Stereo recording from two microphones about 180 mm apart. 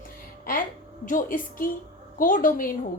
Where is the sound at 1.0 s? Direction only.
45° left (ahead or behind).